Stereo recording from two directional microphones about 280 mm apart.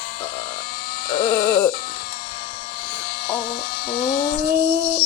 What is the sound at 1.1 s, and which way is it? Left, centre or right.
Sheep, centre.